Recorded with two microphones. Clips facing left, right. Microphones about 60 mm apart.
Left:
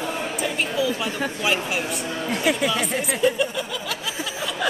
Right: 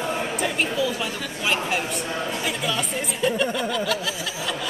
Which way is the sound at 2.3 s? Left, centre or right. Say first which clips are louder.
Left 5 dB; left.